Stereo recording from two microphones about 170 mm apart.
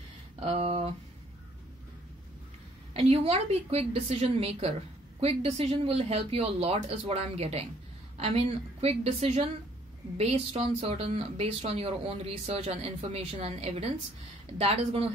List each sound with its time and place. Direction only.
0.4 s speech: 40° right (ahead or behind)
2.9 s speech: 35° right (ahead or behind)